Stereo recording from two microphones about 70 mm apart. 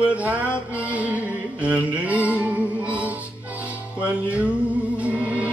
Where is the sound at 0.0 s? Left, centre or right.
Right.